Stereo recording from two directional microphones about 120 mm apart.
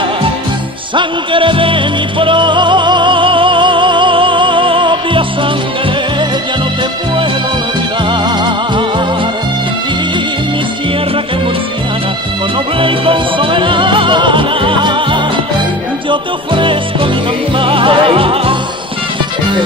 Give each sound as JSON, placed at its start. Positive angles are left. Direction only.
{"t": 0.9, "sound": "music", "side_deg": -45}
{"t": 8.1, "sound": "music", "side_deg": -40}
{"t": 12.7, "sound": "music", "side_deg": -45}